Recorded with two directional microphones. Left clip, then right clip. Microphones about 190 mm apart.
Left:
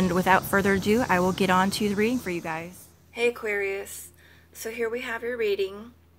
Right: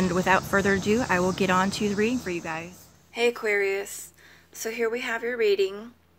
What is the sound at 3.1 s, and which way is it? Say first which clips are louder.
A woman's voice: right 2 dB; 25° right (ahead or behind).